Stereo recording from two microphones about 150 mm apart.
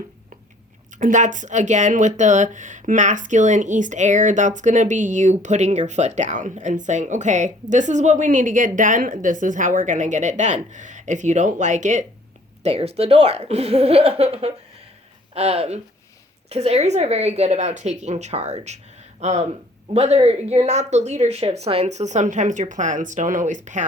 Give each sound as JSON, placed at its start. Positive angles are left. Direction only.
{"t": 0.9, "sound": "speech", "side_deg": -60}
{"t": 12.6, "sound": "speech", "side_deg": -45}